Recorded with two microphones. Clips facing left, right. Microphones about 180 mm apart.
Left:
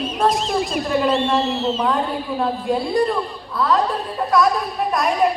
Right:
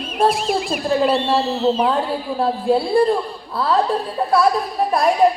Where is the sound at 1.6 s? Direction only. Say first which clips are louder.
Right 4 dB; 10° right (ahead or behind).